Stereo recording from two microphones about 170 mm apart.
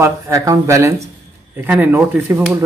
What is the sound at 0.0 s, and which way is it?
Speech, 20° right (ahead or behind).